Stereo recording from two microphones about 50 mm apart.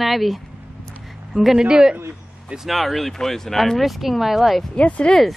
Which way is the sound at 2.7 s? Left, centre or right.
Centre.